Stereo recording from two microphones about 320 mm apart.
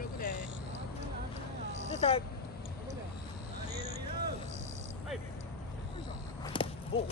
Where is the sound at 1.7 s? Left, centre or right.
Right.